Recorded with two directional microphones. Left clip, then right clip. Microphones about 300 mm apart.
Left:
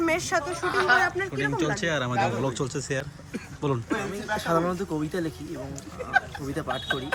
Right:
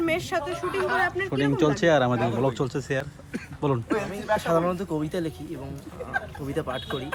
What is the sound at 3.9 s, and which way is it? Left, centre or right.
Speech, right.